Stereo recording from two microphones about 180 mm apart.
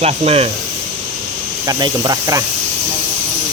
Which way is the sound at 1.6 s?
20° right (ahead or behind).